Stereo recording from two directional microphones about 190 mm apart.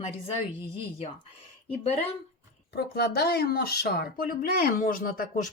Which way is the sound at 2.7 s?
55° left (ahead or behind).